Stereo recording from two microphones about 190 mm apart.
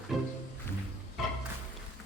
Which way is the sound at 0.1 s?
Centre (ahead or behind).